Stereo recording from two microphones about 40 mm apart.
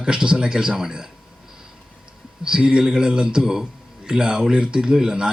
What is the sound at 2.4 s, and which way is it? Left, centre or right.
A man's voice, right.